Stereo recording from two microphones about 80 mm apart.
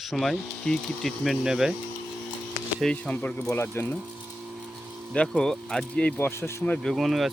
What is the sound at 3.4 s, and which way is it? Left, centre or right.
Speech, left.